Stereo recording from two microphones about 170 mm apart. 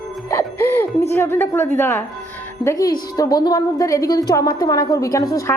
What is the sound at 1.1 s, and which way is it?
Chuckle, 10° left (ahead or behind).